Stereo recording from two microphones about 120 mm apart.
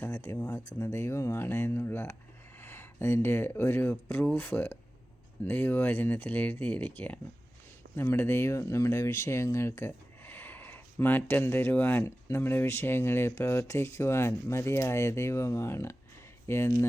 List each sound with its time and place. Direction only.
0.0 s speech: 20° left (ahead or behind)